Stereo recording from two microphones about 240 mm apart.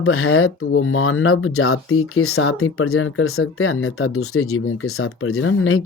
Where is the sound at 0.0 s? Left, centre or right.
Left.